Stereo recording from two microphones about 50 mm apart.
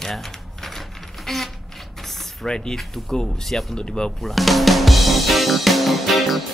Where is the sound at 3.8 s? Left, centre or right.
Centre.